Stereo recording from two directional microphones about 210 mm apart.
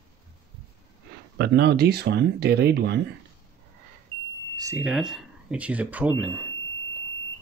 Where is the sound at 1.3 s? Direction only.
55° right (ahead or behind).